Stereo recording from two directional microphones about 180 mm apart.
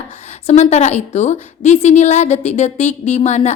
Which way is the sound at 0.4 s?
40° left (ahead or behind).